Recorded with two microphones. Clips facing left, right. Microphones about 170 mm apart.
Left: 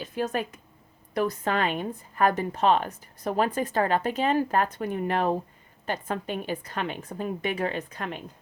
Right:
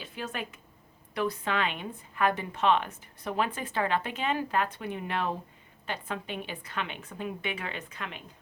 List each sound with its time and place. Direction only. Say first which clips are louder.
0.0 s a woman's voice: left 8 dB; 40° left (ahead or behind)